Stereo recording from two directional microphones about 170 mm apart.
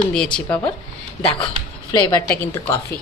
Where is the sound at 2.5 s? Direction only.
15° left (ahead or behind).